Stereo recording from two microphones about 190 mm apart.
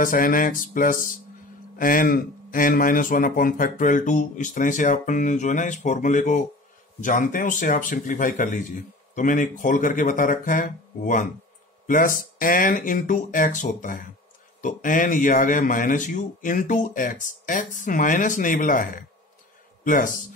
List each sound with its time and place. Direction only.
0.0 s a man's voice: 45° left (ahead or behind)
12.4 s a man's voice: 45° left (ahead or behind)